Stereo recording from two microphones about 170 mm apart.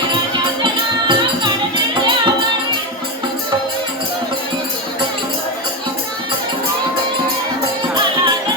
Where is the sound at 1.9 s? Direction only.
30° right (ahead or behind).